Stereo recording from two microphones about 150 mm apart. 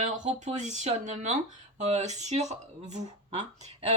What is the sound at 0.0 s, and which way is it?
Speech, 50° right (ahead or behind).